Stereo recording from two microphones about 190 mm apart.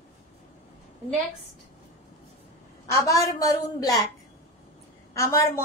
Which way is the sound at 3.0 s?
15° left (ahead or behind).